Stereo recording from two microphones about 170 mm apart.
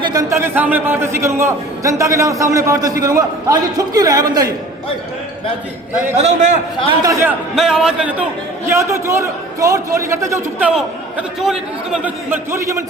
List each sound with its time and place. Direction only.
0.0 s a man's voice: 20° right (ahead or behind)
6.1 s a man's voice: 45° right (ahead or behind)
7.0 s a man's voice: 20° right (ahead or behind)
7.5 s speech: centre (ahead or behind)
8.7 s a man's voice: 15° right (ahead or behind)
10.7 s a man's voice: 5° right (ahead or behind)